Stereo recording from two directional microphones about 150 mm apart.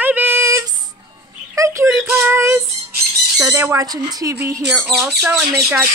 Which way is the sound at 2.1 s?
15° right (ahead or behind).